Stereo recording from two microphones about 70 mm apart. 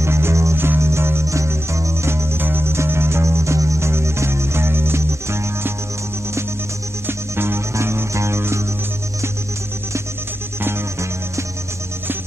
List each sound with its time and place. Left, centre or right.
0.0 s music: right
7.1 s music: right